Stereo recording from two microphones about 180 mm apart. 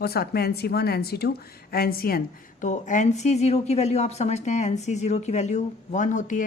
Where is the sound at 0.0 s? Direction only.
60° left (ahead or behind).